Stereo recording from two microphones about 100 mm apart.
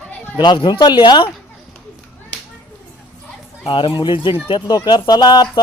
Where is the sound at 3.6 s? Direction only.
55° left (ahead or behind).